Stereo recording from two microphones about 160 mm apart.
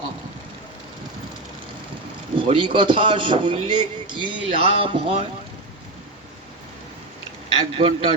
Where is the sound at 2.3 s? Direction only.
35° right (ahead or behind).